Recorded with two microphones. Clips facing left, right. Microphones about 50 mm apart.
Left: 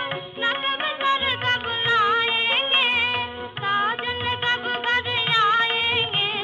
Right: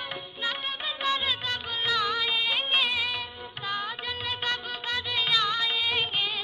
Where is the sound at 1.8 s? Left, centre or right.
Left.